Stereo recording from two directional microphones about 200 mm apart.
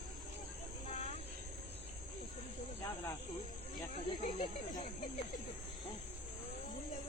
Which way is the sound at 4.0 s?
35° left (ahead or behind).